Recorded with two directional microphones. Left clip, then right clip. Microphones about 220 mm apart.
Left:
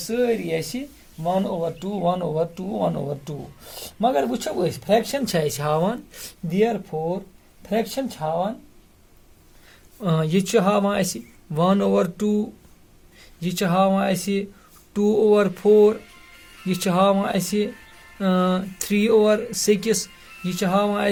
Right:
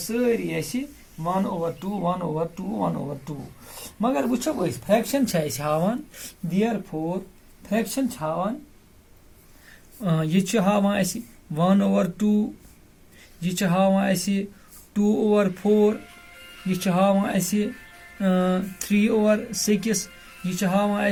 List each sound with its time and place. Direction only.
0.1 s speech: 35° left (ahead or behind)
10.0 s speech: 45° left (ahead or behind)